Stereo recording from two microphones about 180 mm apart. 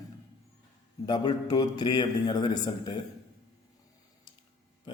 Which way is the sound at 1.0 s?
25° left (ahead or behind).